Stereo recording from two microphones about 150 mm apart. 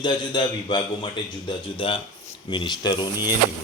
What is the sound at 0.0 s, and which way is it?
A man's voice, 30° left (ahead or behind).